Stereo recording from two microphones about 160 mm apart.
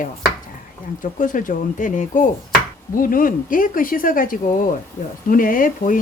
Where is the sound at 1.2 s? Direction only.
55° left (ahead or behind).